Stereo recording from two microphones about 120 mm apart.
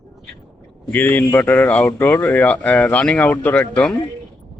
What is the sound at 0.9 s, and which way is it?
Speech, 15° left (ahead or behind).